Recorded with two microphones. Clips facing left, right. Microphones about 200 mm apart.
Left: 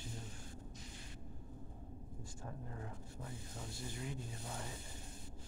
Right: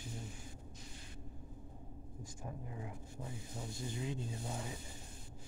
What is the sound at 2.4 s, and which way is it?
Speech, 10° right (ahead or behind).